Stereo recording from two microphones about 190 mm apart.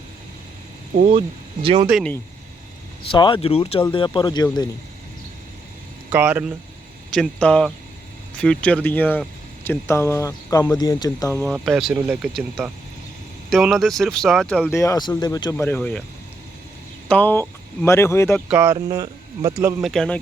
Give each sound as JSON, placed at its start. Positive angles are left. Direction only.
{"t": 0.9, "sound": "speech", "side_deg": -40}
{"t": 1.6, "sound": "speech", "side_deg": -30}
{"t": 1.9, "sound": "speech", "side_deg": 0}
{"t": 3.1, "sound": "speech", "side_deg": 25}
{"t": 6.1, "sound": "speech", "side_deg": -10}
{"t": 7.1, "sound": "speech", "side_deg": 5}
{"t": 11.4, "sound": "speech", "side_deg": 0}
{"t": 14.7, "sound": "speech", "side_deg": 15}
{"t": 17.1, "sound": "speech", "side_deg": 10}
{"t": 18.3, "sound": "speech", "side_deg": -5}
{"t": 19.8, "sound": "speech", "side_deg": 0}